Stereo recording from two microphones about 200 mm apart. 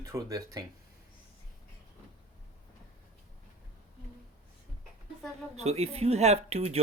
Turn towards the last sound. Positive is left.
turn(degrees=-30)  # may be behind; listen again after turning